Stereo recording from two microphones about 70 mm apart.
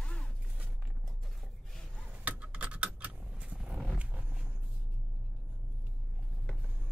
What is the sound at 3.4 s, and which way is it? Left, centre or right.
Roaring cats, centre.